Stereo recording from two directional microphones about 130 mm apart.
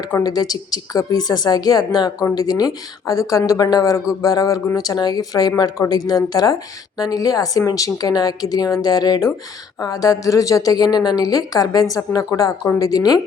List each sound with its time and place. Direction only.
0.2 s speech: 30° left (ahead or behind)